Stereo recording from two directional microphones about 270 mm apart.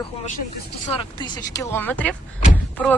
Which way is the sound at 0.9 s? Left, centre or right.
Centre.